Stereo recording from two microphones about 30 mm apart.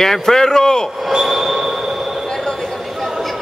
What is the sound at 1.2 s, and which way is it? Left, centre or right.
Train wheels squealing, centre.